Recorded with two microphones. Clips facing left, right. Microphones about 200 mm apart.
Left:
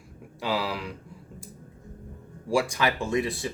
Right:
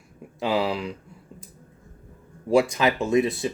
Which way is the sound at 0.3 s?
25° right (ahead or behind).